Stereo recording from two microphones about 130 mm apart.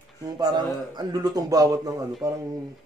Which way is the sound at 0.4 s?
30° right (ahead or behind).